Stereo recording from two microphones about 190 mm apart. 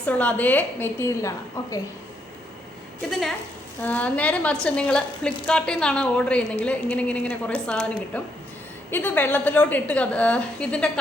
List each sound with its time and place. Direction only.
0.0 s a woman's voice: 10° left (ahead or behind)
3.1 s a woman's voice: centre (ahead or behind)